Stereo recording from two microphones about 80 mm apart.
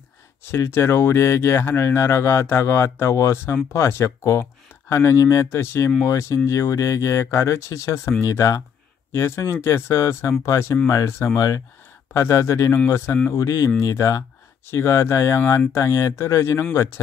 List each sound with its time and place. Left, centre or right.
0.4 s speech: left
12.1 s speech: left
13.3 s speech: left